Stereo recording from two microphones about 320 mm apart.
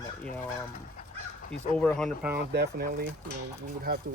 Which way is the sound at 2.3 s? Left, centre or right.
Right.